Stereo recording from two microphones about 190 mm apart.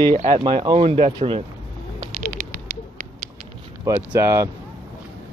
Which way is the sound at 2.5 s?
45° right (ahead or behind).